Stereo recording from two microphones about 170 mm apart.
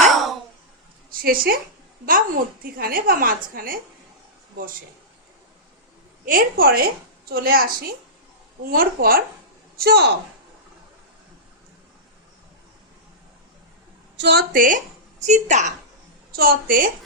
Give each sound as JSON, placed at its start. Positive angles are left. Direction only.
{"t": 1.1, "sound": "a woman's voice", "side_deg": -60}
{"t": 6.2, "sound": "a woman's voice", "side_deg": -60}
{"t": 14.2, "sound": "speech", "side_deg": -90}
{"t": 14.5, "sound": "a woman's voice", "side_deg": -55}
{"t": 16.3, "sound": "a woman's voice", "side_deg": -60}